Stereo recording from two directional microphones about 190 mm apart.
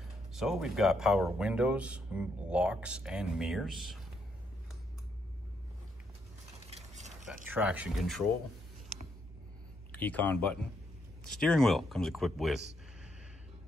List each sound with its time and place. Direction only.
0.3 s speech: centre (ahead or behind)
6.7 s mechanisms: 35° right (ahead or behind)
7.4 s speech: 10° right (ahead or behind)
9.9 s speech: 10° left (ahead or behind)